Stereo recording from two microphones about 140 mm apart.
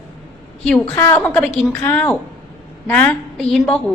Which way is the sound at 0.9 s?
20° left (ahead or behind).